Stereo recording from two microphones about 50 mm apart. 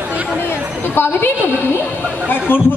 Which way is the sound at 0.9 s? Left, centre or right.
Left.